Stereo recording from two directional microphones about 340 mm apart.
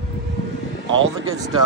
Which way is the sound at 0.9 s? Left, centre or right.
Right.